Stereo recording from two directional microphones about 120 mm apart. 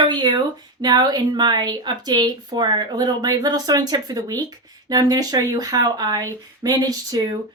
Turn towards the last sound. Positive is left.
turn(degrees=-30)  # may be behind; listen again after turning